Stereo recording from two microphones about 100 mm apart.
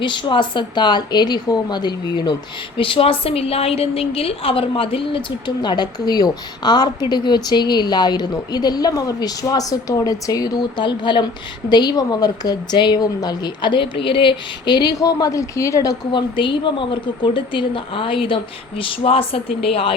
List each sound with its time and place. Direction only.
0.0 s a woman's voice: 55° left (ahead or behind)
2.7 s a woman's voice: 60° left (ahead or behind)
5.6 s a woman's voice: 45° left (ahead or behind)
16.1 s a woman's voice: 55° left (ahead or behind); by 19.9 s 70° left (ahead or behind)